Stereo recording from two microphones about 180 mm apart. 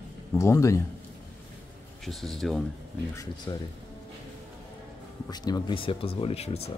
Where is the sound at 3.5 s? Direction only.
20° left (ahead or behind).